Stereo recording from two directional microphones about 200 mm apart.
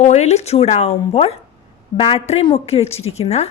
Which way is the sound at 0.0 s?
35° left (ahead or behind).